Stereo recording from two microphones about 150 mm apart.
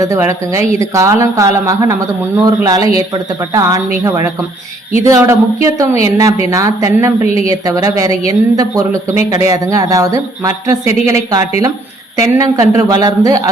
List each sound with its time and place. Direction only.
0.0 s speech: 20° right (ahead or behind)
5.0 s speech: 20° right (ahead or behind)